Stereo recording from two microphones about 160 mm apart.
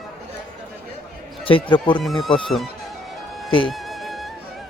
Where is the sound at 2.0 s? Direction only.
Centre (ahead or behind).